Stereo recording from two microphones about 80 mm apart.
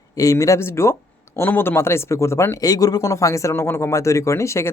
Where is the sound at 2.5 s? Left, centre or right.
Left.